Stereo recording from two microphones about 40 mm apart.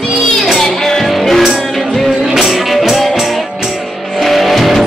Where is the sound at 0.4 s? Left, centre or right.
Centre.